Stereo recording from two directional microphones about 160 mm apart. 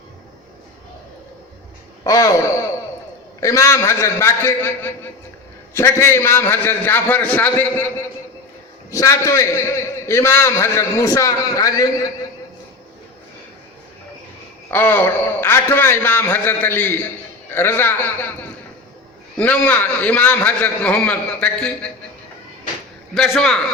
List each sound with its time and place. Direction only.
2.0 s a man's voice: 20° left (ahead or behind)
8.9 s a man's voice: 20° left (ahead or behind)
14.7 s a man's voice: 15° left (ahead or behind)
19.4 s a man's voice: 10° left (ahead or behind)
23.1 s a man's voice: 5° left (ahead or behind)